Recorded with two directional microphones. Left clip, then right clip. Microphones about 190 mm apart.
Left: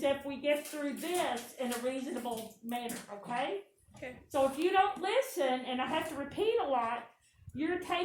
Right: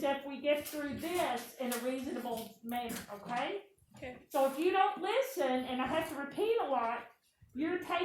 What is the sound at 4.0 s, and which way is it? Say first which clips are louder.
A woman's voice: left 1 dB; 40° left (ahead or behind).